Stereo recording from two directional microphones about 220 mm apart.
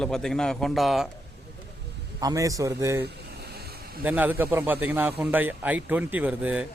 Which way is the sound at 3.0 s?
45° right (ahead or behind).